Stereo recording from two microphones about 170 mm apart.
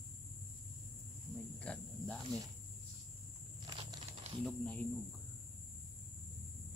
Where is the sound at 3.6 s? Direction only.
30° right (ahead or behind).